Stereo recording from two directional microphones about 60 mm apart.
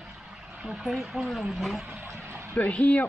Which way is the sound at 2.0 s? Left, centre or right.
Right.